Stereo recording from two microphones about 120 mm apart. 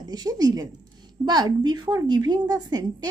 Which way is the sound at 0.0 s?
35° right (ahead or behind).